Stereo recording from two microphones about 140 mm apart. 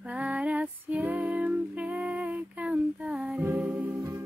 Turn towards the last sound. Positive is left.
turn(degrees=-10)  # may be behind; listen again after turning